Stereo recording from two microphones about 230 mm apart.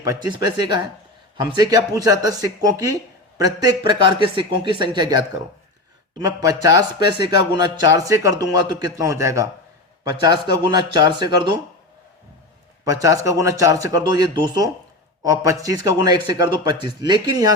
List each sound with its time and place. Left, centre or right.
0.0 s speech: centre
12.8 s speech: centre